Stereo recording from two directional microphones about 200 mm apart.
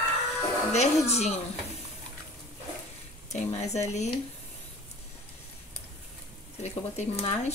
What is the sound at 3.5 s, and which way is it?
Speech, 35° left (ahead or behind).